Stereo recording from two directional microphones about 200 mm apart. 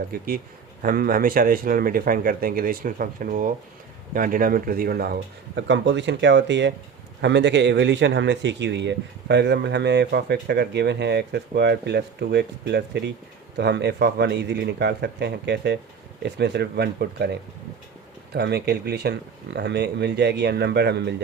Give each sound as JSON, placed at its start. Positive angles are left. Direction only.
{"t": 0.3, "sound": "a man's voice", "side_deg": -45}
{"t": 5.5, "sound": "speech", "side_deg": -65}
{"t": 18.3, "sound": "speech", "side_deg": -55}